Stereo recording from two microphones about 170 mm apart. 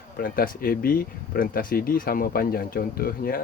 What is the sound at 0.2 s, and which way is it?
Speech, 60° left (ahead or behind).